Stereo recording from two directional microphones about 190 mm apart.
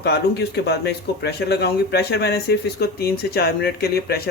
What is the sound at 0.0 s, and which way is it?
Speech, 60° left (ahead or behind).